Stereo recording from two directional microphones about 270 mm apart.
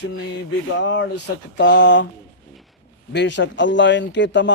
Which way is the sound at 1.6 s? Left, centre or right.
Left.